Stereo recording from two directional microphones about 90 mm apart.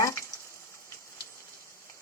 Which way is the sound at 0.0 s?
35° left (ahead or behind).